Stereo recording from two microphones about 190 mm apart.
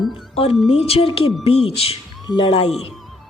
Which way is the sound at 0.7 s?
30° left (ahead or behind).